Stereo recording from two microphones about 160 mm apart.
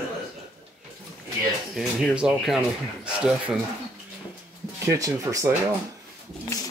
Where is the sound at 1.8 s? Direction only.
Centre (ahead or behind).